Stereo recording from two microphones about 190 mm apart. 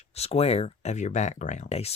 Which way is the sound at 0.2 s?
30° left (ahead or behind).